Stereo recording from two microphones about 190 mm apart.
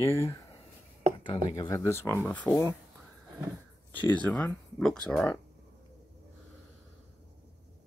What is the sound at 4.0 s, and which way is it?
Speech, 5° left (ahead or behind).